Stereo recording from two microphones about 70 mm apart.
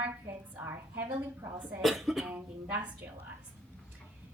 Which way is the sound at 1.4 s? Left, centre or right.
Right.